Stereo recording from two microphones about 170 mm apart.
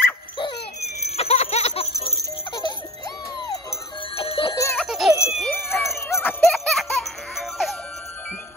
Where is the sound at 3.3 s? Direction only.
25° left (ahead or behind).